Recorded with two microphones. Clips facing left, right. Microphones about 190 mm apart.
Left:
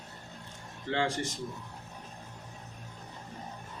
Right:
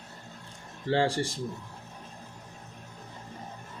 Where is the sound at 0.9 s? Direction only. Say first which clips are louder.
Right 5 dB; 35° right (ahead or behind).